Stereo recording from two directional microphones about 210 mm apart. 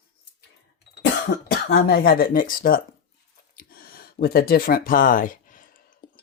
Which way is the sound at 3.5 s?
45° left (ahead or behind).